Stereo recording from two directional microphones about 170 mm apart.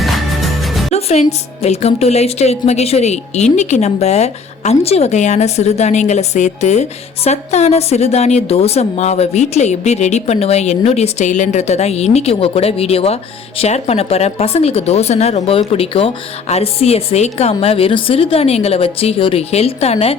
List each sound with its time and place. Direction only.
0.0 s music: centre (ahead or behind)
0.9 s speech: 40° left (ahead or behind)